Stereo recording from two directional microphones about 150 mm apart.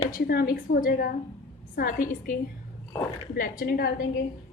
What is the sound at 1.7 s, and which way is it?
Speech, 65° left (ahead or behind).